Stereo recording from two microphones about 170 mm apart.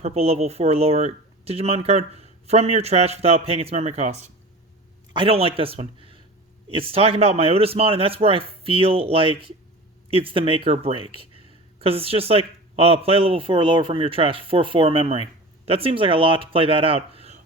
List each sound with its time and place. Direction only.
0.0 s speech: 40° right (ahead or behind)